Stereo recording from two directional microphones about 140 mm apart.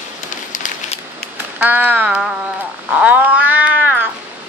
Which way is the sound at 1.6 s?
10° right (ahead or behind).